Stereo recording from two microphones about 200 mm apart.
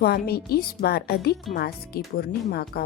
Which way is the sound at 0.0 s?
50° left (ahead or behind).